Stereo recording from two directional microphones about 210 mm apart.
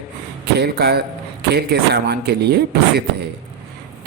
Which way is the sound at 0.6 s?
50° right (ahead or behind).